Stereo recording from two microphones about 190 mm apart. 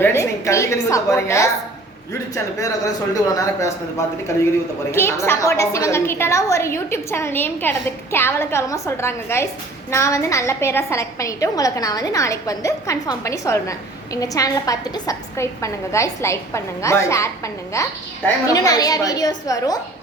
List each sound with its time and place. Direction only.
0.0 s a woman's voice: 15° left (ahead or behind)